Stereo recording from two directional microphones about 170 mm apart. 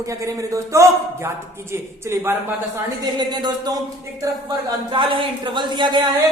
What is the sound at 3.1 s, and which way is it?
Speech, 25° right (ahead or behind).